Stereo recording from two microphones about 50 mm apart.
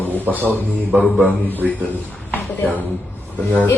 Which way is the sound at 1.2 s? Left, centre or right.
Left.